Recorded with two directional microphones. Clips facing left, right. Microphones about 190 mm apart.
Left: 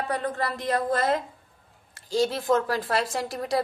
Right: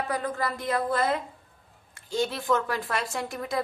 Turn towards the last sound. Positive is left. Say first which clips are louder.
# left 3 dB
turn(degrees=35)  # may be behind; listen again after turning